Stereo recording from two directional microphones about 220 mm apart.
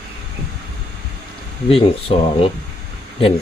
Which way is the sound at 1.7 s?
25° left (ahead or behind).